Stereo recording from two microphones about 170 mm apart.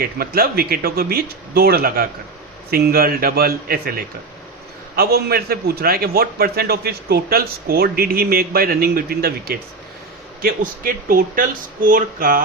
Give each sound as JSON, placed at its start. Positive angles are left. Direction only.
{"t": 0.0, "sound": "a man's voice", "side_deg": -65}